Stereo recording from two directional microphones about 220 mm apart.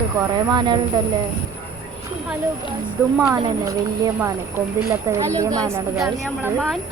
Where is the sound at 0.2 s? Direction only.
20° right (ahead or behind).